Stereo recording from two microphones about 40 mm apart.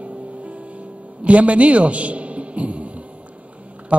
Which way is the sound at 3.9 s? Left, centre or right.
Right.